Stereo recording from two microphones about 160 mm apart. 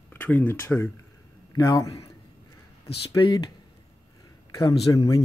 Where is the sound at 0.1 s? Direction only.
10° left (ahead or behind).